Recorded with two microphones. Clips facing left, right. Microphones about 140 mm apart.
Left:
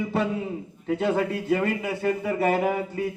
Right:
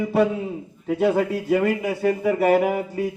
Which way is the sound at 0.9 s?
10° right (ahead or behind).